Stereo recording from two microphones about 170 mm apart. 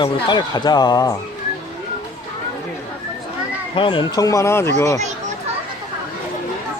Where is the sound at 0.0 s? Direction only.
25° left (ahead or behind).